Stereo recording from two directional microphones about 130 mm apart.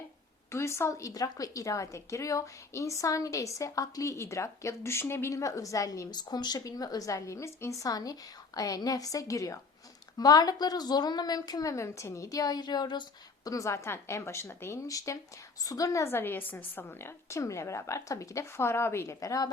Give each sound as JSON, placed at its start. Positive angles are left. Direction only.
{"t": 0.5, "sound": "speech", "side_deg": 20}